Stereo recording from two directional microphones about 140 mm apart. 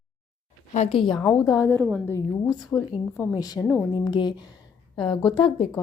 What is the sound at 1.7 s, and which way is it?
Speech, 20° right (ahead or behind).